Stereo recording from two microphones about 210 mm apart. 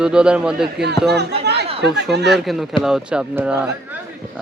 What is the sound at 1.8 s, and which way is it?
Speech, 55° right (ahead or behind).